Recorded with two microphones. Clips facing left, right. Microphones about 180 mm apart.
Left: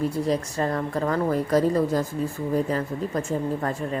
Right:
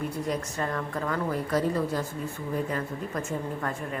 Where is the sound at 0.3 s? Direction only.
35° left (ahead or behind).